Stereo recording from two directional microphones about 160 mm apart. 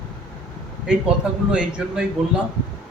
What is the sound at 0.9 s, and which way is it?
A man's voice, 5° right (ahead or behind).